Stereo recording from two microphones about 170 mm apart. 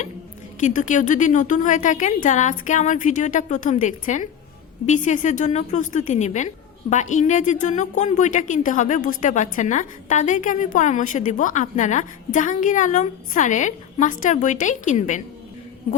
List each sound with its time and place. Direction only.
0.6 s a woman's voice: 45° left (ahead or behind)